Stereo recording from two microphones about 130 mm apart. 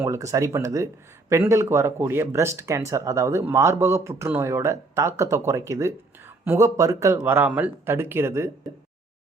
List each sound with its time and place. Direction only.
0.0 s speech: 25° right (ahead or behind)